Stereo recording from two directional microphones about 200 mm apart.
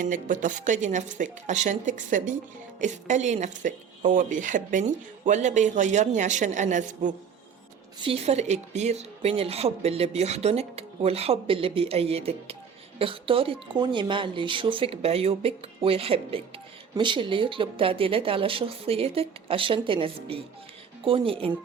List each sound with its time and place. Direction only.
0.0 s a woman's voice: 40° right (ahead or behind)